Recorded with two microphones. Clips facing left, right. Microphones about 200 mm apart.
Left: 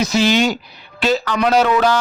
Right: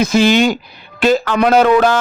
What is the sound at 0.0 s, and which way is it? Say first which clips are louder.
A man's voice: right 4 dB; 55° right (ahead or behind).